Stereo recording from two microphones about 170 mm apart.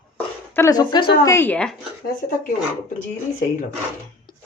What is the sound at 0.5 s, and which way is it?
Speech, 20° left (ahead or behind).